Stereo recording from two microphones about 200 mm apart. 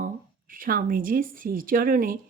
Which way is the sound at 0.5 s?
45° right (ahead or behind).